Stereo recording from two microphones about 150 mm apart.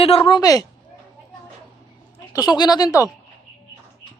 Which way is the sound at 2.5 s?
25° left (ahead or behind).